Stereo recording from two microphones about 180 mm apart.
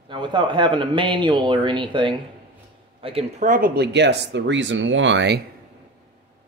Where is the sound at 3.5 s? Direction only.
60° right (ahead or behind); by 5.4 s 75° right (ahead or behind).